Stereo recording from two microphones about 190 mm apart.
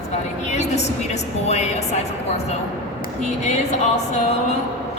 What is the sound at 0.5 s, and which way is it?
A woman's voice, 35° left (ahead or behind).